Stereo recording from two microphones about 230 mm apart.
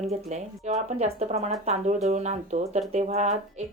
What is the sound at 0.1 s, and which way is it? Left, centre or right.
Speech, right.